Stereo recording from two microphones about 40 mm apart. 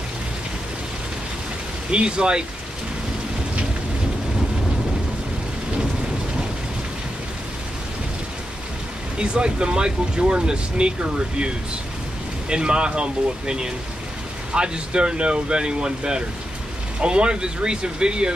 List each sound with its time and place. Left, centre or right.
1.9 s speech: right
9.2 s speech: right